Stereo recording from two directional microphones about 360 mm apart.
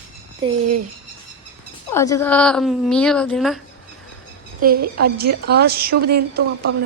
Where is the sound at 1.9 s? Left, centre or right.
Centre.